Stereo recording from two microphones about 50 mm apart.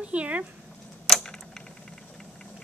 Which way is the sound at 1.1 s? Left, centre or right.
Centre.